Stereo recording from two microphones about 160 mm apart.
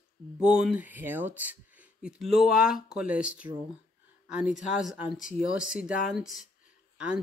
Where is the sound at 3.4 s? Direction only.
20° right (ahead or behind).